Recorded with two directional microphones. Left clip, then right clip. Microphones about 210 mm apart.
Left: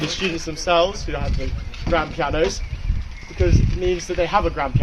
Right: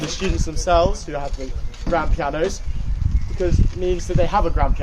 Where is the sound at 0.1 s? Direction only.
10° left (ahead or behind).